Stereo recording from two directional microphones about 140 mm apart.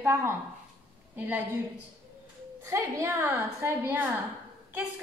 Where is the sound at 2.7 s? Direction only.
20° right (ahead or behind).